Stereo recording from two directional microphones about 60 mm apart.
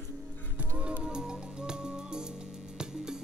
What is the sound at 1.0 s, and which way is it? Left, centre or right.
Music, centre.